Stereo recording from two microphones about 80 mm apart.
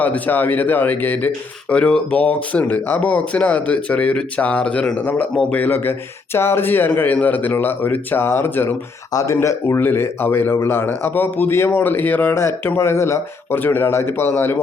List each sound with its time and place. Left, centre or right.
0.0 s speech: left
9.1 s speech: left